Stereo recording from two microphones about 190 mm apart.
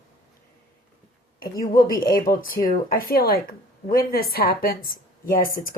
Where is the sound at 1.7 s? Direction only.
50° left (ahead or behind).